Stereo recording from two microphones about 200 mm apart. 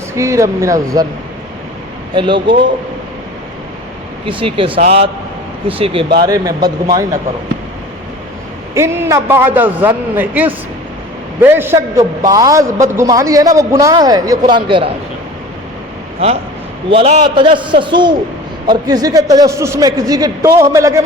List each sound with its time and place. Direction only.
0.1 s a man's voice: 15° right (ahead or behind)
2.1 s a man's voice: 25° right (ahead or behind)
4.3 s a man's voice: 25° right (ahead or behind)
8.7 s a man's voice: 15° right (ahead or behind)
16.9 s a man's voice: 25° right (ahead or behind)